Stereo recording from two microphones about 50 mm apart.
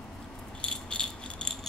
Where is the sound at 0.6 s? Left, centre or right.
Centre.